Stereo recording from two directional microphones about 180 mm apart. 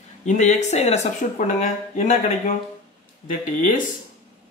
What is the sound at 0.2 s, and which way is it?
Speech, 40° left (ahead or behind).